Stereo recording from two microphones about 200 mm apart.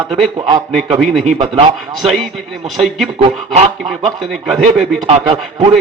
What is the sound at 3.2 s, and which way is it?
Speech, 30° right (ahead or behind).